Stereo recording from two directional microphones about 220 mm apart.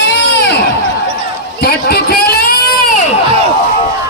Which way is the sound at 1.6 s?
45° left (ahead or behind).